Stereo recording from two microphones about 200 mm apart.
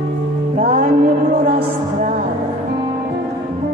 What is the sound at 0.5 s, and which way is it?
Music, 45° right (ahead or behind).